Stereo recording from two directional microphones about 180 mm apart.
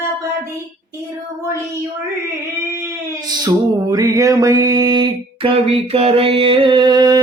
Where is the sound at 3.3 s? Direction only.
20° right (ahead or behind).